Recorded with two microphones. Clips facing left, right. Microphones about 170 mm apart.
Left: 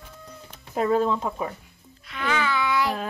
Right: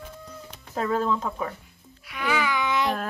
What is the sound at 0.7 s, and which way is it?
Speech, 15° left (ahead or behind).